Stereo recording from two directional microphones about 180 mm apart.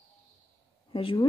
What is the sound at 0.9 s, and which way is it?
Speech, 30° left (ahead or behind).